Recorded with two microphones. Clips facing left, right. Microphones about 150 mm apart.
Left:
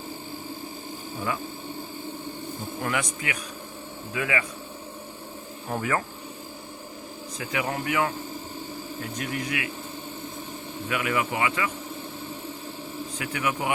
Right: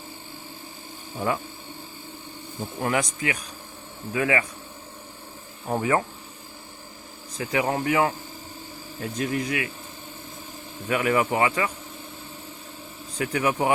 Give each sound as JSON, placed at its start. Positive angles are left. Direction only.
{"t": 2.8, "sound": "speech", "side_deg": -35}
{"t": 5.7, "sound": "speech", "side_deg": -25}
{"t": 7.3, "sound": "speech", "side_deg": -35}
{"t": 9.1, "sound": "speech", "side_deg": -30}
{"t": 10.8, "sound": "speech", "side_deg": -35}
{"t": 13.1, "sound": "speech", "side_deg": -35}